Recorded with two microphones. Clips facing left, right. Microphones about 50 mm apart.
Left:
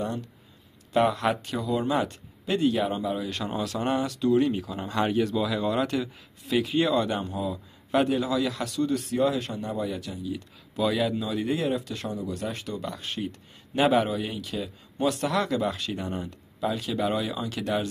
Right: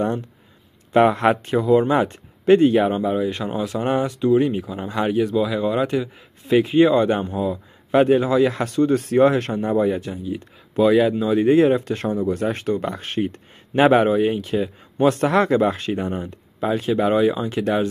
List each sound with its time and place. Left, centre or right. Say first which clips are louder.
0.0 s speech: right 8 dB; right; by 6.0 s centre
6.4 s speech: right 9 dB; right